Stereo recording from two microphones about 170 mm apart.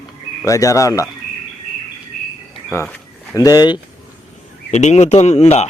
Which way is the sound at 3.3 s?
20° left (ahead or behind).